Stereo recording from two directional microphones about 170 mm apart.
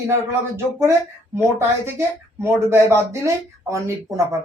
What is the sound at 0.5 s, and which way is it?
Speech, 15° right (ahead or behind).